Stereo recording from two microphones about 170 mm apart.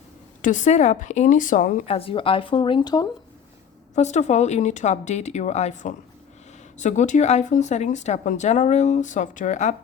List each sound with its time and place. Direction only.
0.4 s speech: 45° left (ahead or behind)
1.9 s speech: 35° left (ahead or behind)
3.9 s speech: 40° left (ahead or behind)